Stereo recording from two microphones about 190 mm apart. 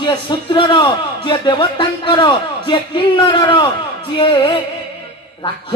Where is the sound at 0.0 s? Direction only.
25° left (ahead or behind).